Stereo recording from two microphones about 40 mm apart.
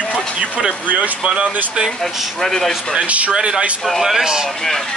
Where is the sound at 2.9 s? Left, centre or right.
Right.